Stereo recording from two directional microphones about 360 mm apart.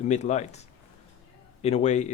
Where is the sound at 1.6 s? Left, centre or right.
Centre.